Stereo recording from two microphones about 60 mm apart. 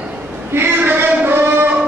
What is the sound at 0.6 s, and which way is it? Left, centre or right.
Music, right.